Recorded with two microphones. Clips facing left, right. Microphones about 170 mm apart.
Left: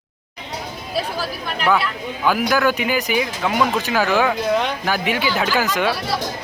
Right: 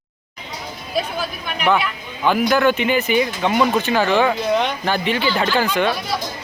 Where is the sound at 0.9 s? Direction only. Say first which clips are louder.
Right 1 dB; 30° left (ahead or behind).